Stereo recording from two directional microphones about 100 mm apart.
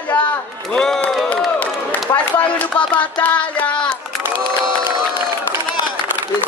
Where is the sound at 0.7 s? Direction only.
5° left (ahead or behind).